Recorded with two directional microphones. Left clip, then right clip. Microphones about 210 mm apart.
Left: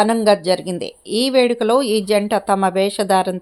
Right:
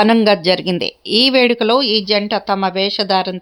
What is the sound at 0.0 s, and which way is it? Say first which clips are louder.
A woman's voice: right 2 dB; 30° right (ahead or behind).